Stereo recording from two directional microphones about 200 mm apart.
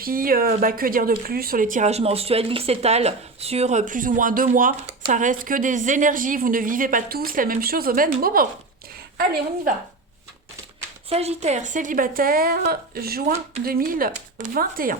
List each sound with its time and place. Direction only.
0.0 s a woman's voice: 45° right (ahead or behind)
11.1 s a woman's voice: 30° right (ahead or behind)